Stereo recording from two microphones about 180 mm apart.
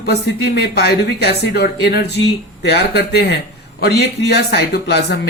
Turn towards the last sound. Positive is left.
turn(degrees=65)  # may be behind; listen again after turning